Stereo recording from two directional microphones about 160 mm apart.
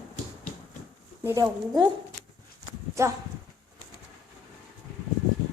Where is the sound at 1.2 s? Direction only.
20° right (ahead or behind).